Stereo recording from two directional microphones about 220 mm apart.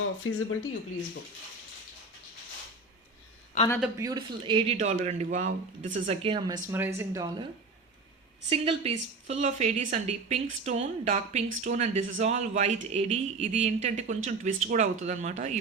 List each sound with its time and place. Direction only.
0.0 s speech: 65° left (ahead or behind)
3.9 s speech: 15° right (ahead or behind)
6.7 s speech: 10° right (ahead or behind)
8.4 s a woman's voice: 25° right (ahead or behind)